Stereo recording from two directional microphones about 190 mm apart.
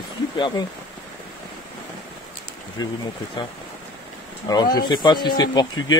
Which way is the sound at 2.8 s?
20° left (ahead or behind).